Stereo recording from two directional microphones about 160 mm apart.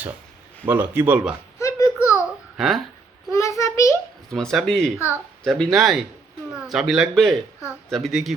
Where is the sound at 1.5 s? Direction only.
20° left (ahead or behind).